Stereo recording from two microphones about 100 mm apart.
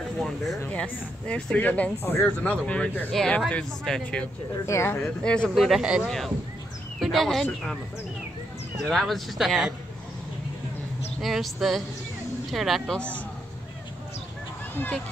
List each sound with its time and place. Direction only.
0.7 s speech: 10° left (ahead or behind)
4.6 s speech: 30° left (ahead or behind)
5.2 s speech: 10° left (ahead or behind)
5.5 s speech: 5° right (ahead or behind)
8.7 s speech: centre (ahead or behind)
11.1 s speech: centre (ahead or behind)